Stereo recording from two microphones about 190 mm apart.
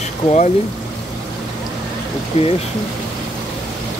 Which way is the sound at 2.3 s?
40° left (ahead or behind).